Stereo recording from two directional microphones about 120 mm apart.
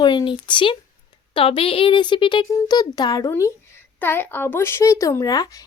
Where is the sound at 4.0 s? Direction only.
15° left (ahead or behind).